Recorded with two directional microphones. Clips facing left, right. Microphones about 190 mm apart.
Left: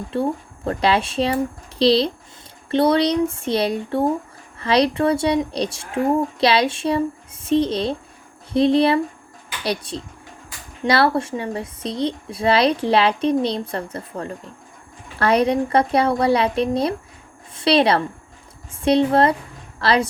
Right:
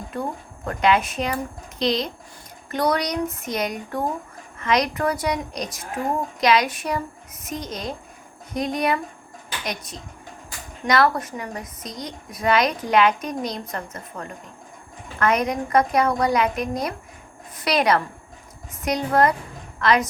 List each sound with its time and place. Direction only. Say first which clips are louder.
0.1 s a woman's voice: left 7 dB; 30° left (ahead or behind)